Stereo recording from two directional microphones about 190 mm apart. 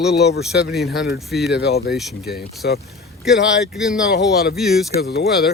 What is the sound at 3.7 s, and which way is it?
Speech, 5° right (ahead or behind).